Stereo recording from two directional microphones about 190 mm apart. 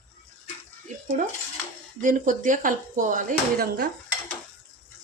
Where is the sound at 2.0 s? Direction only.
40° right (ahead or behind).